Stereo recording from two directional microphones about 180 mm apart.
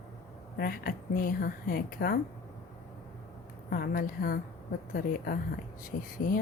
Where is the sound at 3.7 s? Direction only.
55° left (ahead or behind).